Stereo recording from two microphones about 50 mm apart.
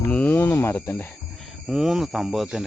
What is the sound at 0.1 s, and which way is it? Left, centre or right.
Cricket, left.